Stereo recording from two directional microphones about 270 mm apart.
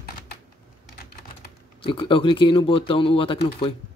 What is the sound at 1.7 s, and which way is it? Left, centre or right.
Speech, centre.